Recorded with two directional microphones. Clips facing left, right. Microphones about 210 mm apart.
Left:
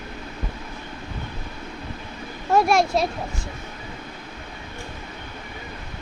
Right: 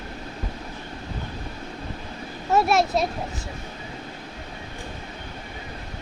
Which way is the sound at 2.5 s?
5° right (ahead or behind).